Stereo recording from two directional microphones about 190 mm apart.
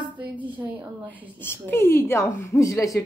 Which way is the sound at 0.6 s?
10° right (ahead or behind).